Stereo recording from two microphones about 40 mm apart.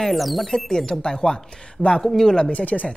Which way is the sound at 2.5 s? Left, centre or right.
Left.